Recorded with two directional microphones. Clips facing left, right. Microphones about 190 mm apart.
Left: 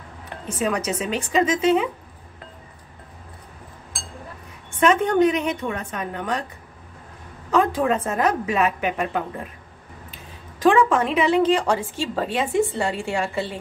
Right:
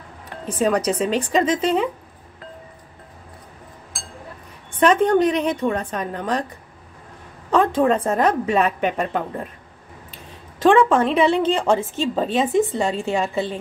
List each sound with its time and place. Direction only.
0.5 s a woman's voice: 35° right (ahead or behind)
4.7 s a woman's voice: 35° right (ahead or behind)
7.5 s a woman's voice: 30° right (ahead or behind)
10.6 s a woman's voice: 25° right (ahead or behind)